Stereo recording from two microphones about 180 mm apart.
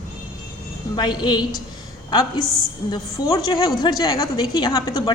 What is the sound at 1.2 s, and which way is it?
A woman's voice, 25° left (ahead or behind).